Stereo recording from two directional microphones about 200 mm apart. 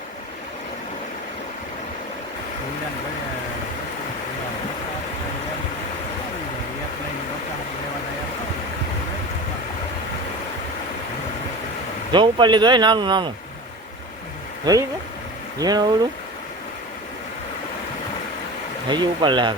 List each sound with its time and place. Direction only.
12.1 s speech: 20° right (ahead or behind)
14.6 s speech: 20° right (ahead or behind)
18.9 s speech: 20° right (ahead or behind)